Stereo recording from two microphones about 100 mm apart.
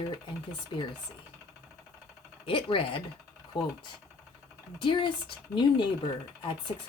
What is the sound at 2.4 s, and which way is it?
Speech, 65° left (ahead or behind).